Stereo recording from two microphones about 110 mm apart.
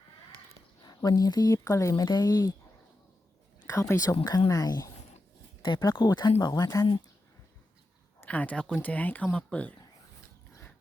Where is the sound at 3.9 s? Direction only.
25° left (ahead or behind).